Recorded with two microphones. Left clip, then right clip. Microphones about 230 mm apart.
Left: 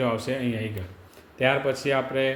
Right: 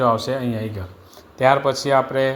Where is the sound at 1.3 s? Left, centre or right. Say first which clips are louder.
Right 7 dB; centre.